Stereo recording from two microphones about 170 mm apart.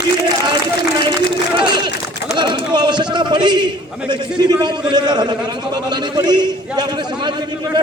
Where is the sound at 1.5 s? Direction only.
25° right (ahead or behind).